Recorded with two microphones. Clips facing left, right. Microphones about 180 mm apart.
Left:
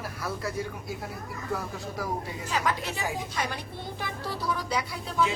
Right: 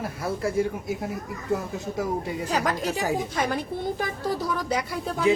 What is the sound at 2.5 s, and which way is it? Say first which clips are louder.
A woman's voice: right 3 dB; 40° right (ahead or behind).